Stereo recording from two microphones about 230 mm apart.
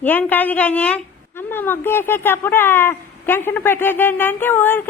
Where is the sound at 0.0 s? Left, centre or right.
Centre.